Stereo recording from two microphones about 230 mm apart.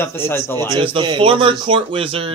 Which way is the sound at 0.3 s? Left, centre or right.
Centre.